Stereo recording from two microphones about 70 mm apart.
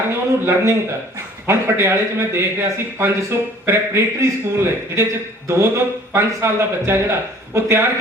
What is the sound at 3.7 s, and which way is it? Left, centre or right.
Speech, right.